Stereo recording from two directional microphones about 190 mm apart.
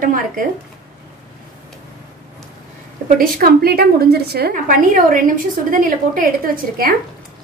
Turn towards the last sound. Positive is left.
turn(degrees=-50)  # may be behind; listen again after turning